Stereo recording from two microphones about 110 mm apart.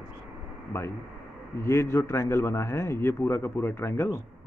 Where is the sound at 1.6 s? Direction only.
25° left (ahead or behind).